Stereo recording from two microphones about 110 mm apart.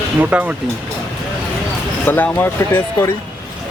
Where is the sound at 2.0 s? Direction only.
15° left (ahead or behind).